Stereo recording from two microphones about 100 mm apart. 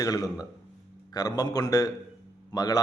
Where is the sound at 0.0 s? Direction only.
35° left (ahead or behind).